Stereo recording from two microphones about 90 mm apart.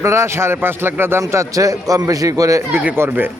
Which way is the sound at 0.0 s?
30° right (ahead or behind).